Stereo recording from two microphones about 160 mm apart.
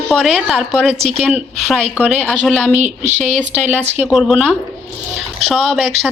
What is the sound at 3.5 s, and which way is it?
Speech, 10° right (ahead or behind).